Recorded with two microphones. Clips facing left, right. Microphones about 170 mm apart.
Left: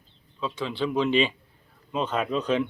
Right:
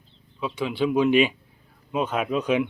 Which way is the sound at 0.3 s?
10° right (ahead or behind).